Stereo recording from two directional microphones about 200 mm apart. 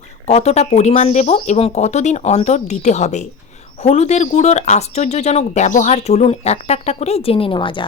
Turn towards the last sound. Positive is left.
turn(degrees=25)  # may be behind; listen again after turning